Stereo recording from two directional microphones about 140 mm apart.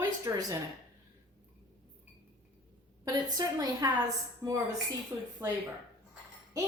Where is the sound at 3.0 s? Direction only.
30° right (ahead or behind).